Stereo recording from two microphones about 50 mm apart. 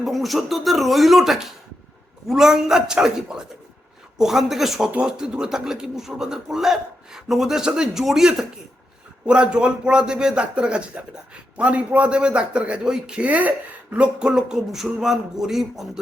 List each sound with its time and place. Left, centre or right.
0.0 s a man's voice: centre
13.2 s a man's voice: right; by 15.9 s centre